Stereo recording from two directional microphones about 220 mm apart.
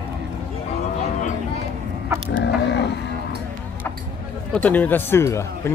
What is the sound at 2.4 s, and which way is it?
Mechanisms, 50° left (ahead or behind).